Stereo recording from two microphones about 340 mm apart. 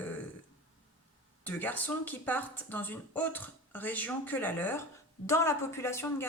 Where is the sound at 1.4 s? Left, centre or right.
Centre.